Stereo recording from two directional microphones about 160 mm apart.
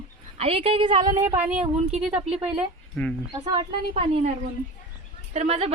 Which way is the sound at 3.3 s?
25° right (ahead or behind).